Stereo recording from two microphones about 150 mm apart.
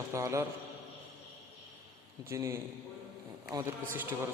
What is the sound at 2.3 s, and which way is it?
A man's voice, 20° right (ahead or behind).